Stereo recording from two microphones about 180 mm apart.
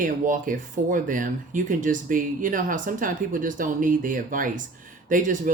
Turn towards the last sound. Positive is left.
turn(degrees=-45)  # may be behind; listen again after turning